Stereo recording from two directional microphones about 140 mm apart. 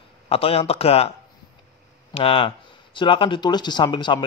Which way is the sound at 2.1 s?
40° left (ahead or behind).